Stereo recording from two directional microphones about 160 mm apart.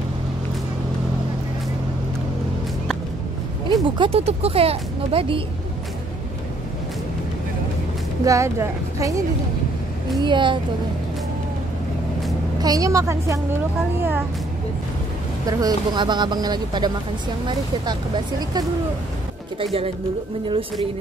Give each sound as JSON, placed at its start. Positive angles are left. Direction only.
{"t": 3.6, "sound": "speech", "side_deg": -30}
{"t": 8.2, "sound": "speech", "side_deg": -20}
{"t": 10.2, "sound": "speech", "side_deg": -30}
{"t": 12.5, "sound": "speech", "side_deg": -25}
{"t": 15.4, "sound": "speech", "side_deg": -25}
{"t": 19.6, "sound": "speech", "side_deg": -35}